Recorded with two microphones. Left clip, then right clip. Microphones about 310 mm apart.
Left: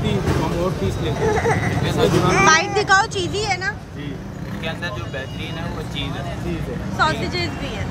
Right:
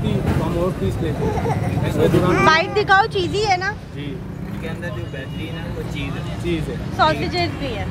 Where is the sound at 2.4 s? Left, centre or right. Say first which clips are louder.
Left 1 dB; centre.